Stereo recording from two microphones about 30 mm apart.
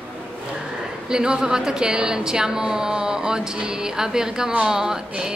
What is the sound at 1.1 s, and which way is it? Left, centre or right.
A woman's voice, right.